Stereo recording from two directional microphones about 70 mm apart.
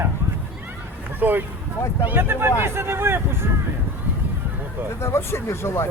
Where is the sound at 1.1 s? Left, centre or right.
Right.